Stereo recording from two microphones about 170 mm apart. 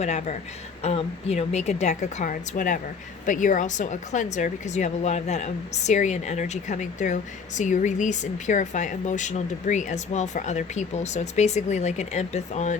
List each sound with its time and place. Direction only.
0.0 s a woman's voice: 40° left (ahead or behind)